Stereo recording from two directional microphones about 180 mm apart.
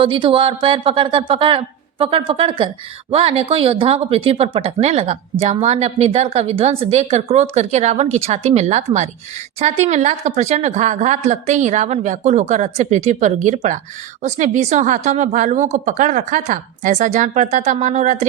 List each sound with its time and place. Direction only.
0.0 s speech: 30° right (ahead or behind)